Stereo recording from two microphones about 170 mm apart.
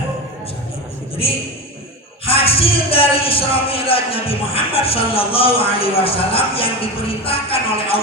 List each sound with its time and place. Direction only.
2.2 s speech: 35° left (ahead or behind)